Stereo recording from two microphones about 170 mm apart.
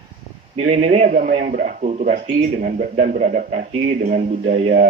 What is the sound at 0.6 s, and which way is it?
A man's voice, 45° right (ahead or behind).